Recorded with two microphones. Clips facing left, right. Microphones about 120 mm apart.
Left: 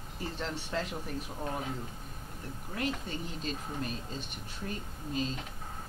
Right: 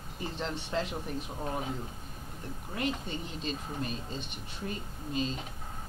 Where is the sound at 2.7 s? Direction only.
Centre (ahead or behind).